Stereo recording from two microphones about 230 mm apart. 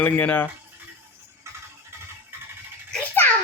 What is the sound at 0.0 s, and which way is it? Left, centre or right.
Speech, centre.